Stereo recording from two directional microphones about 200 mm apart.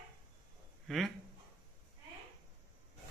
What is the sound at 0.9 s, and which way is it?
Speech, centre (ahead or behind).